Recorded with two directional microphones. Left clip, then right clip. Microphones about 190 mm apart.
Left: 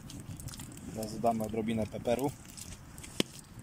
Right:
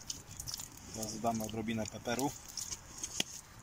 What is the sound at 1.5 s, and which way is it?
Speech, 15° left (ahead or behind).